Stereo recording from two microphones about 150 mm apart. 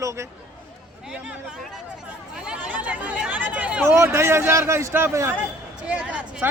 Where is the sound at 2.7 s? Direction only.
10° right (ahead or behind).